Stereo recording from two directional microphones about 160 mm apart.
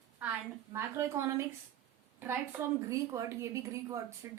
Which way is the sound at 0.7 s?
15° right (ahead or behind).